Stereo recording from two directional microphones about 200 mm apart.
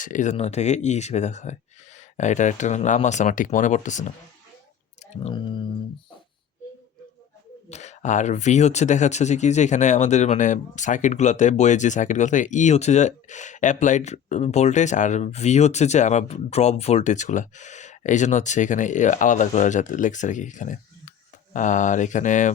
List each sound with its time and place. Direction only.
0.0 s speech: 40° left (ahead or behind)
5.1 s speech: 30° left (ahead or behind)
7.7 s speech: 35° left (ahead or behind)